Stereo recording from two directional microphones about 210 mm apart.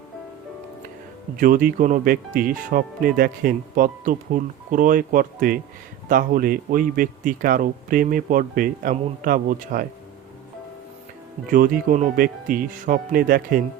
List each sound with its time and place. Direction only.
1.4 s speech: 40° right (ahead or behind)
11.5 s speech: 40° right (ahead or behind)